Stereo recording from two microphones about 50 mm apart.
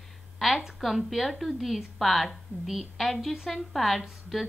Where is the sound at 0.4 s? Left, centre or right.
Centre.